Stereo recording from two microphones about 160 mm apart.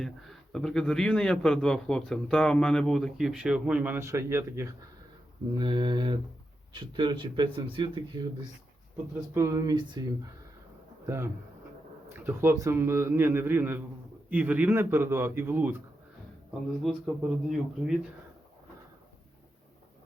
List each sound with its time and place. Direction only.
0.0 s a man's voice: centre (ahead or behind); by 4.7 s 15° right (ahead or behind)
5.5 s speech: 30° right (ahead or behind)
9.3 s a man's voice: 20° right (ahead or behind)
16.8 s a man's voice: centre (ahead or behind)